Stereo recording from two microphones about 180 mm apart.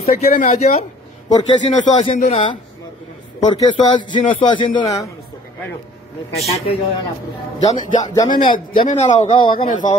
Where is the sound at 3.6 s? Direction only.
25° left (ahead or behind).